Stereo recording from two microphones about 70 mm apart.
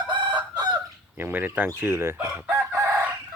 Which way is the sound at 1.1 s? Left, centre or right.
Right.